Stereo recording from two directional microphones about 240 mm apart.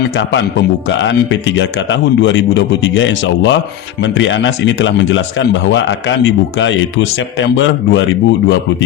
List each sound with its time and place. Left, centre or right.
0.2 s speech: left